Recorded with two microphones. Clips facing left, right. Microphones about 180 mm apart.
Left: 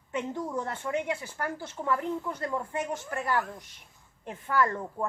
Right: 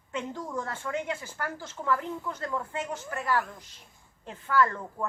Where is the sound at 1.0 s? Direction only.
15° left (ahead or behind).